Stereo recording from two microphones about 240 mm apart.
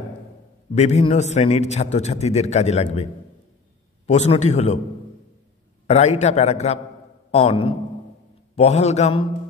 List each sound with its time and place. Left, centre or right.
0.7 s a man's voice: left
5.9 s a man's voice: left